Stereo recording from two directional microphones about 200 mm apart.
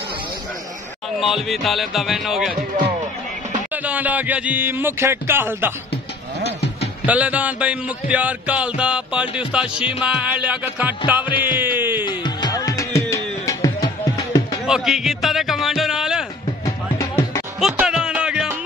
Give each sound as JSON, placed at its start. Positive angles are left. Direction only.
{"t": 1.2, "sound": "music", "side_deg": 0}
{"t": 3.7, "sound": "music", "side_deg": -5}
{"t": 7.1, "sound": "music", "side_deg": -5}
{"t": 11.2, "sound": "music", "side_deg": 25}
{"t": 14.7, "sound": "a man's voice", "side_deg": 0}
{"t": 16.6, "sound": "music", "side_deg": 15}
{"t": 17.6, "sound": "music", "side_deg": -5}